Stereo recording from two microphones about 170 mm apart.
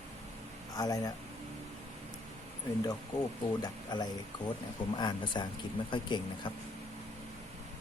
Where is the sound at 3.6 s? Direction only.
25° left (ahead or behind).